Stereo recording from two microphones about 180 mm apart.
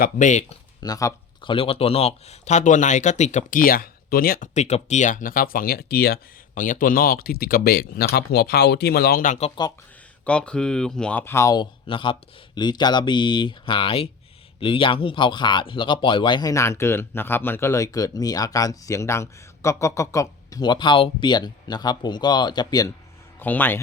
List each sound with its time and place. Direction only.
0.0 s speech: 45° left (ahead or behind)
0.8 s speech: 20° left (ahead or behind); by 4.4 s 55° left (ahead or behind)
4.5 s speech: 40° left (ahead or behind)
10.2 s speech: 5° left (ahead or behind); by 22.9 s 25° left (ahead or behind)
23.4 s speech: 10° left (ahead or behind)